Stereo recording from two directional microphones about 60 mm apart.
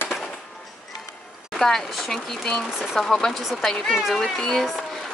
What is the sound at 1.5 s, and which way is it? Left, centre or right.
Speech, centre.